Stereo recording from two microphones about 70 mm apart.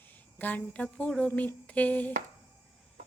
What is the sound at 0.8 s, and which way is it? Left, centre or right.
Speech, centre.